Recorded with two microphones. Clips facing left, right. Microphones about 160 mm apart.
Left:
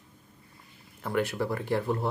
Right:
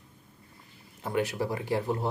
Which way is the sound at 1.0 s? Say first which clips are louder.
Left 1 dB; 15° right (ahead or behind).